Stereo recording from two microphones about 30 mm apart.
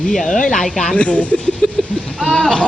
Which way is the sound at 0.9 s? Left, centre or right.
Left.